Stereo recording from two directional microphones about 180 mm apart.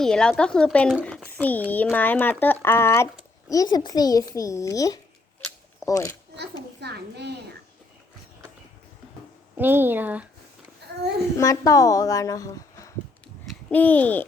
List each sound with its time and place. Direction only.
0.0 s a woman's voice: 5° left (ahead or behind)
6.7 s a child's voice: 70° right (ahead or behind)
9.6 s a woman's voice: 10° right (ahead or behind)
10.8 s a sound: 65° right (ahead or behind)
11.3 s a woman's voice: 20° left (ahead or behind)
13.2 s babbling: 5° left (ahead or behind)